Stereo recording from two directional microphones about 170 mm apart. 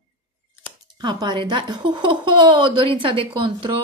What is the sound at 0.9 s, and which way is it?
A woman's voice, 25° right (ahead or behind).